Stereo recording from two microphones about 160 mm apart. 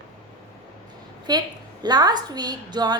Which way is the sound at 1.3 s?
25° right (ahead or behind).